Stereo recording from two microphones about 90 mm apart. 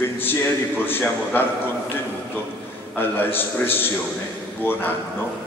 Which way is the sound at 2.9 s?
25° left (ahead or behind).